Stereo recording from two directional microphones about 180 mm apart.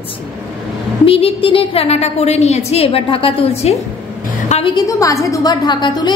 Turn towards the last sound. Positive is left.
turn(degrees=25)  # may be behind; listen again after turning